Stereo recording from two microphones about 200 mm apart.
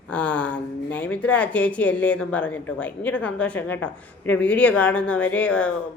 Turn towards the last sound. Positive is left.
turn(degrees=5)  # may be behind; listen again after turning